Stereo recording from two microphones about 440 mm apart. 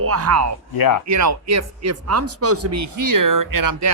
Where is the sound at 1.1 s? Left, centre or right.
Right.